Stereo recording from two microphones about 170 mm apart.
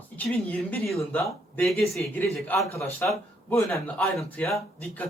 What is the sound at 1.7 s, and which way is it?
A man's voice, 5° left (ahead or behind).